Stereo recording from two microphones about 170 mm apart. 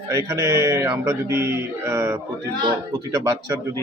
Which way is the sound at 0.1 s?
20° right (ahead or behind).